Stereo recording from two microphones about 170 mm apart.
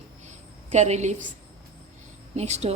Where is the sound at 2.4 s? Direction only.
40° right (ahead or behind).